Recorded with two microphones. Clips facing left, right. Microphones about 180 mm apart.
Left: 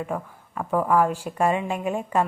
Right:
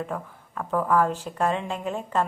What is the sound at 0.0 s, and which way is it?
A woman's voice, 5° left (ahead or behind).